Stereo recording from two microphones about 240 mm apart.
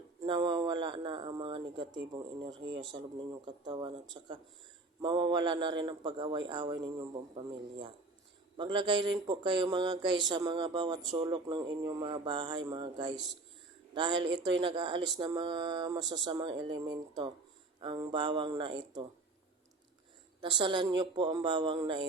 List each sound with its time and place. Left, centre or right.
0.2 s speech: centre
8.5 s speech: centre
20.4 s speech: centre